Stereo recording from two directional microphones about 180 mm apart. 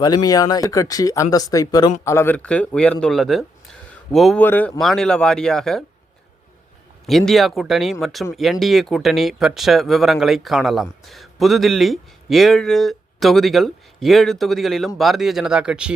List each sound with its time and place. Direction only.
0.0 s a man's voice: 20° left (ahead or behind); by 4.4 s centre (ahead or behind)
4.4 s speech: 10° left (ahead or behind)
7.1 s speech: centre (ahead or behind)